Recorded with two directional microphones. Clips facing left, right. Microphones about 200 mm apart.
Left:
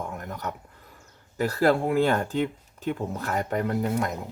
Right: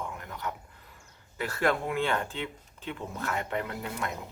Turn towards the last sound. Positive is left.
turn(degrees=40)  # may be behind; listen again after turning